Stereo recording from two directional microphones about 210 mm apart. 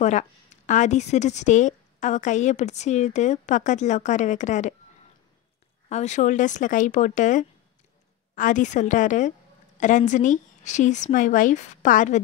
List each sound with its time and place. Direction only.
0.0 s a woman's voice: 35° left (ahead or behind)
5.9 s a woman's voice: 35° left (ahead or behind)